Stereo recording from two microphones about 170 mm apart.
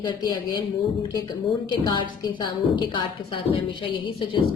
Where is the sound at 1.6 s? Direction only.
25° left (ahead or behind).